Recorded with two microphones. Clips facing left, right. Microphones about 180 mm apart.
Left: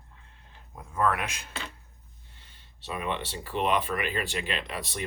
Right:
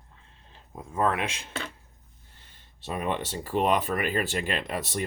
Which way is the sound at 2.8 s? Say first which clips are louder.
Right 3 dB; 45° right (ahead or behind).